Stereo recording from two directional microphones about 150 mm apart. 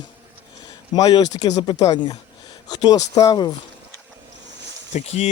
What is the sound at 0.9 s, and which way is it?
Speech, 25° left (ahead or behind).